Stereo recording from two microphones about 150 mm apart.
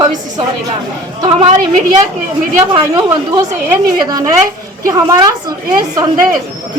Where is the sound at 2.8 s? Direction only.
25° right (ahead or behind).